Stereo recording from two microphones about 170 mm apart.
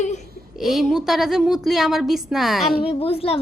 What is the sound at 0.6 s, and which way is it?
A woman's voice, centre (ahead or behind).